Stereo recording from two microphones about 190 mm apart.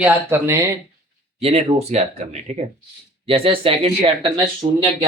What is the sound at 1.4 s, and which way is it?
Speech, 30° right (ahead or behind).